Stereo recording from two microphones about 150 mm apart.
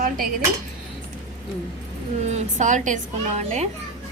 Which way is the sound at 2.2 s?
50° right (ahead or behind).